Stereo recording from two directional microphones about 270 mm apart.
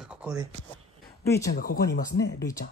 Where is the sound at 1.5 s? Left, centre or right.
Left.